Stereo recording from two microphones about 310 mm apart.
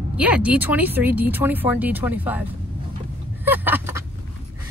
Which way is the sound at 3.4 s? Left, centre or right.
Centre.